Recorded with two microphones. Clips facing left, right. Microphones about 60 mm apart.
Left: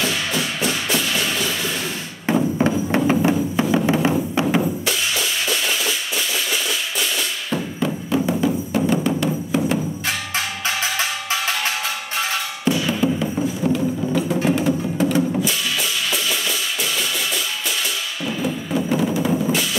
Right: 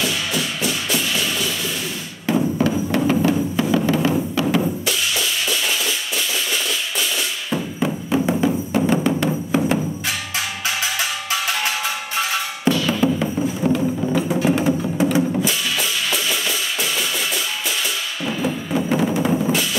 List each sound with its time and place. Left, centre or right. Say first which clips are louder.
0.0 s music: even; left
2.2 s a sound: even; left
3.1 s music: even; left
7.5 s music: right 1 dB; right
10.0 s music: left 1 dB; left
12.8 s music: right 1 dB; right
16.3 s music: right 1 dB; centre
18.8 s music: right 1 dB; right
19.3 s drum: right 1 dB; right